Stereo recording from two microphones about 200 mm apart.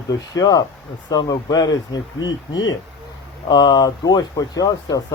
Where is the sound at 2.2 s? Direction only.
70° left (ahead or behind).